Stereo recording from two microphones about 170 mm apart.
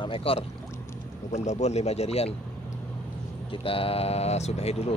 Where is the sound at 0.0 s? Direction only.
30° left (ahead or behind).